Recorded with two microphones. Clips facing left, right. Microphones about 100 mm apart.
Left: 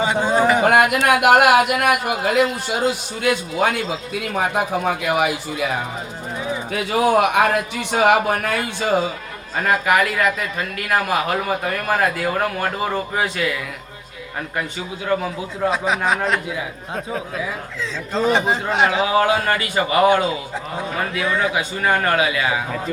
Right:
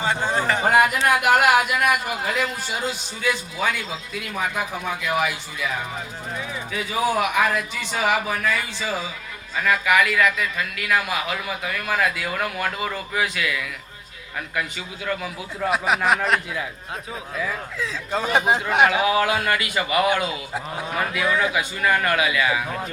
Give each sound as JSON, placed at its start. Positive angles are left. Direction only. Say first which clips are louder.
{"t": 0.0, "sound": "a sound", "louder": "left 6 dB", "side_deg": 15}
{"t": 0.6, "sound": "a man's voice", "louder": "left 3 dB", "side_deg": 70}
{"t": 15.0, "sound": "speech", "louder": "left 6 dB", "side_deg": 30}
{"t": 16.0, "sound": "a man's voice", "louder": "even", "side_deg": 0}
{"t": 18.3, "sound": "a man's voice", "louder": "even", "side_deg": -15}
{"t": 18.9, "sound": "speech", "louder": "left 3 dB", "side_deg": 30}
{"t": 21.2, "sound": "a man's voice", "louder": "even", "side_deg": 0}
{"t": 21.5, "sound": "speech", "louder": "left 2 dB", "side_deg": 30}